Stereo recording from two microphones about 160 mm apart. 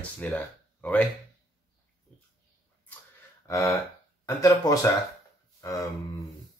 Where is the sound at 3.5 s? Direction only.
20° left (ahead or behind).